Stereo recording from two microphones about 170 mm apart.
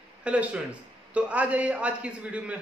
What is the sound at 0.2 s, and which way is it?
A man's voice, 5° right (ahead or behind).